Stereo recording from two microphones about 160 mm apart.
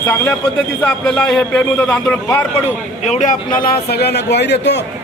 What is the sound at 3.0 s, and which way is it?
A man's voice, 50° left (ahead or behind).